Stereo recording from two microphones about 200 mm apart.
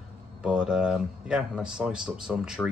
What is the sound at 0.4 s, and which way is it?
Speech, 5° right (ahead or behind).